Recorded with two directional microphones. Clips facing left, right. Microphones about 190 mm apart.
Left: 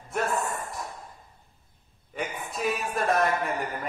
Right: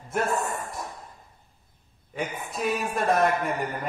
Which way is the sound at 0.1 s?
Centre (ahead or behind).